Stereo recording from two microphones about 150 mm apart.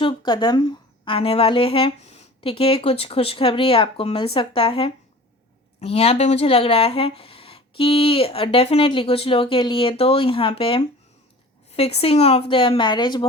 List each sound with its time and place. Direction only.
0.0 s a woman's voice: 30° left (ahead or behind)